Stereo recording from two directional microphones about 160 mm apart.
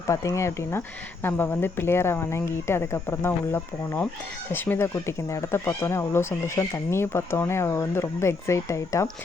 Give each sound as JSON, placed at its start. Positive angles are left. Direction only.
{"t": 0.1, "sound": "speech", "side_deg": 20}